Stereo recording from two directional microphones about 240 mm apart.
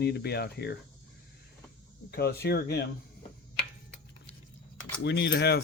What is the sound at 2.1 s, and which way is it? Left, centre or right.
Speech, left.